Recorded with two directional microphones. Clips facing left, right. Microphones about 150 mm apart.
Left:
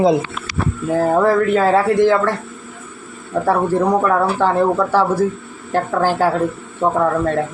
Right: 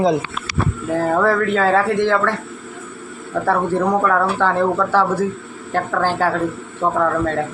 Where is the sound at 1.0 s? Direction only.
20° left (ahead or behind).